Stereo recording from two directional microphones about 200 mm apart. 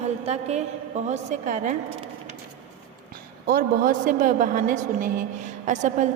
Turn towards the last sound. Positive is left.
turn(degrees=-35)  # may be behind; listen again after turning